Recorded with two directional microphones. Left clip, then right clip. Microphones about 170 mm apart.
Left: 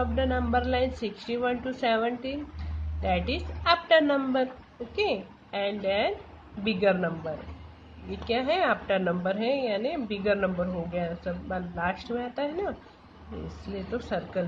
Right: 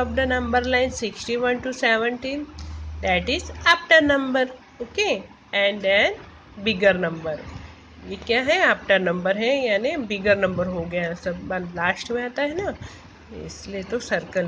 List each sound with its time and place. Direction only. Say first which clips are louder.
0.0 s a woman's voice: right 5 dB; 15° right (ahead or behind)
13.9 s a woman's voice: right 7 dB; 15° right (ahead or behind)